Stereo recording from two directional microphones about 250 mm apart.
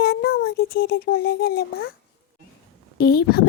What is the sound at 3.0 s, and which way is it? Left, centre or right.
Speech, left.